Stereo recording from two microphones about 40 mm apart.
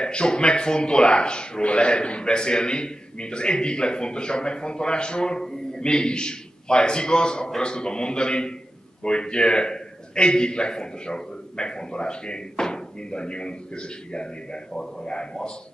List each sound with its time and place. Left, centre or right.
0.0 s speech: left